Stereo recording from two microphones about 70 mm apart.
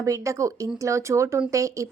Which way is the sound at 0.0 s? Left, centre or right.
Right.